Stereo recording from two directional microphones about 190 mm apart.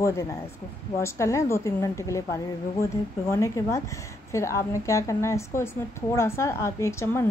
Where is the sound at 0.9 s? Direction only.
15° left (ahead or behind).